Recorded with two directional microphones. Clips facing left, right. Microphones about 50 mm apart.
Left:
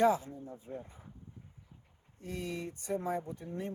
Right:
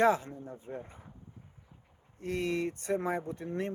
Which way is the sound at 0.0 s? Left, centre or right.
Right.